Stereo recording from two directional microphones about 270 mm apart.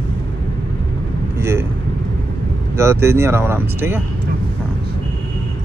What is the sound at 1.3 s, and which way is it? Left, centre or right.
Vehicle, centre.